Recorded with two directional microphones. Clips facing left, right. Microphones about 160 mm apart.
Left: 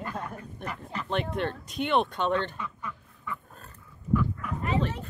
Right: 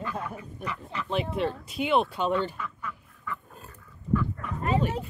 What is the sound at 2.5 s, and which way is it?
Duck, 15° left (ahead or behind).